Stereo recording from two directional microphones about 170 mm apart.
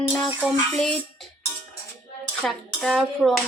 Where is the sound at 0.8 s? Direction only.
Centre (ahead or behind).